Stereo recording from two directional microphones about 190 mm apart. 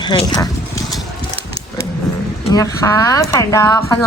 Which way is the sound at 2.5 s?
15° left (ahead or behind).